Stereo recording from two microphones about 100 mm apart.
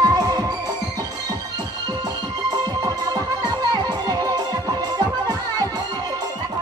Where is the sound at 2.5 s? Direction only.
40° right (ahead or behind).